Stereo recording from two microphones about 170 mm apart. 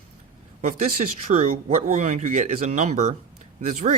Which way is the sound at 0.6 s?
45° right (ahead or behind).